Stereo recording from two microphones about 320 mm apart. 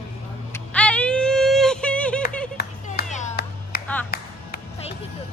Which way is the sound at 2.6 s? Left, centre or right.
Left.